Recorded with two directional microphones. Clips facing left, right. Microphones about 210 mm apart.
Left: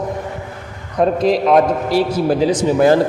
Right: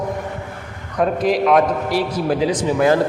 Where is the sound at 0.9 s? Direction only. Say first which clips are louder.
Left 3 dB; 30° left (ahead or behind).